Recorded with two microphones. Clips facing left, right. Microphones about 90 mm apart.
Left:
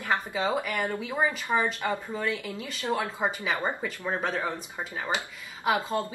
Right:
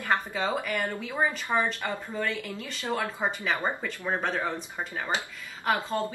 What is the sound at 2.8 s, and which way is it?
Speech, 15° left (ahead or behind).